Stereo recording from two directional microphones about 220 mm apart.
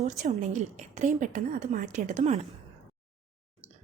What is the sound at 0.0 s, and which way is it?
A woman's voice, 30° right (ahead or behind).